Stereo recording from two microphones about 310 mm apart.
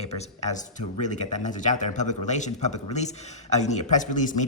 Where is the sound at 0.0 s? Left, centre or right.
Left.